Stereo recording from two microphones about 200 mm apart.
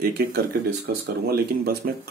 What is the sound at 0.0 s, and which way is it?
Speech, 50° right (ahead or behind).